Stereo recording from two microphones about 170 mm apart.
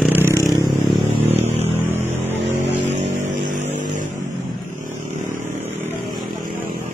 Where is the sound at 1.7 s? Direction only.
10° right (ahead or behind).